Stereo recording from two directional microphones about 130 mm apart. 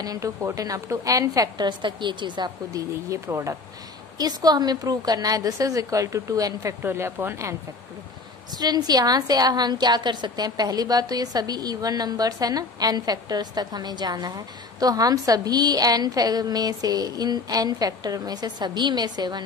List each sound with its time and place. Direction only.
0.0 s a woman's voice: 25° right (ahead or behind)
8.5 s a woman's voice: 30° right (ahead or behind)